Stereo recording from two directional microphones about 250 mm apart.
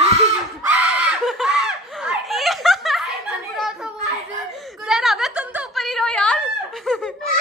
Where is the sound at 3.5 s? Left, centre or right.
Centre.